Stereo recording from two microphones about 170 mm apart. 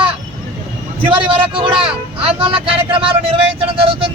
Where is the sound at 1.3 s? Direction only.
30° right (ahead or behind).